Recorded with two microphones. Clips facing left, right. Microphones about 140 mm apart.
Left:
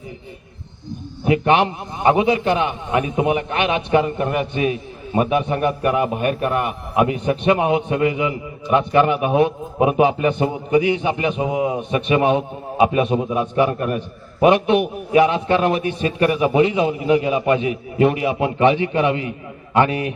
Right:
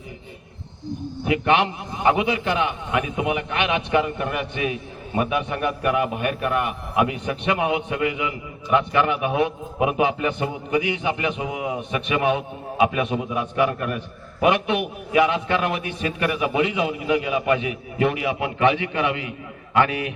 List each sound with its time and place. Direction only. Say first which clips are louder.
1.2 s a man's voice: left 4 dB; 25° left (ahead or behind)